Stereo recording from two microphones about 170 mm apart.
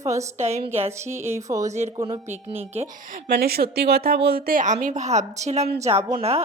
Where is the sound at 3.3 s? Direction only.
70° right (ahead or behind).